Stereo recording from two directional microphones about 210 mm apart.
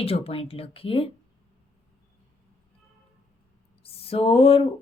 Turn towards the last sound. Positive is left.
turn(degrees=25)  # may be behind; listen again after turning